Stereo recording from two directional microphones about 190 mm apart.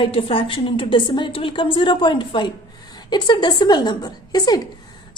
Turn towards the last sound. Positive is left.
turn(degrees=20)  # may be behind; listen again after turning